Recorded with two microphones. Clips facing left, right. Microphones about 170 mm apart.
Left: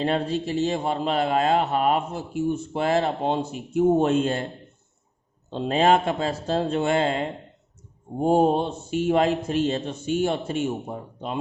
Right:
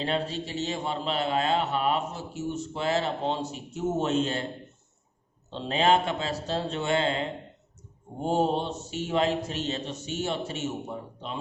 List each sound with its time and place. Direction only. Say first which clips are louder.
0.0 s a man's voice: left 5 dB; 50° left (ahead or behind)
5.5 s a man's voice: left 4 dB; 50° left (ahead or behind)